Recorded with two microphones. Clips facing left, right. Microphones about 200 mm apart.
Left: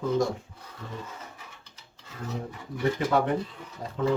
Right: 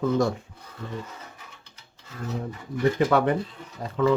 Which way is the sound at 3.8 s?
70° right (ahead or behind).